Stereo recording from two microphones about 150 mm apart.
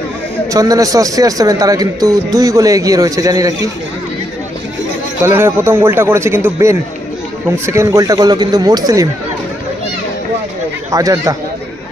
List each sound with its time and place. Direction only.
0.5 s a man's voice: 25° right (ahead or behind)
5.2 s a man's voice: 15° right (ahead or behind)
10.9 s a man's voice: 25° right (ahead or behind)